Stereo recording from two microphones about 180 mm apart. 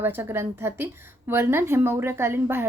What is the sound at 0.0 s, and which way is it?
A woman's voice, 10° right (ahead or behind).